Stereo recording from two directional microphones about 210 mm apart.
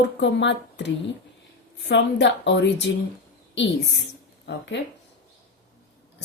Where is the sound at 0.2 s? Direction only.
55° left (ahead or behind).